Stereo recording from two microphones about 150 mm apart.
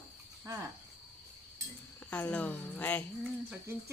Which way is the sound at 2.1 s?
10° left (ahead or behind).